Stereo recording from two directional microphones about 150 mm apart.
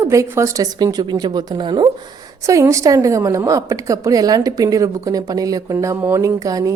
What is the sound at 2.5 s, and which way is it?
A woman's voice, 20° right (ahead or behind).